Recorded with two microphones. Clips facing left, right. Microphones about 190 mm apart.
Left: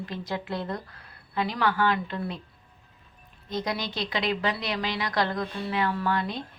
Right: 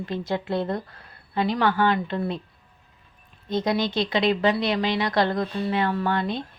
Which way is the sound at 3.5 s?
25° right (ahead or behind).